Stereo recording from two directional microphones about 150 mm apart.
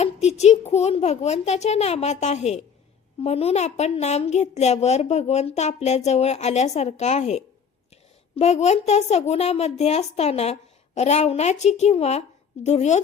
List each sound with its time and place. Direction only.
0.0 s a woman's voice: 45° left (ahead or behind)